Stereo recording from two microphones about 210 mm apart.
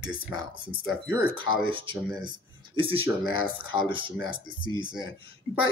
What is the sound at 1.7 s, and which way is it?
Speech, 25° right (ahead or behind).